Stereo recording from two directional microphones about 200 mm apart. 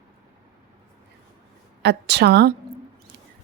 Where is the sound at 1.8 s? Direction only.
55° right (ahead or behind).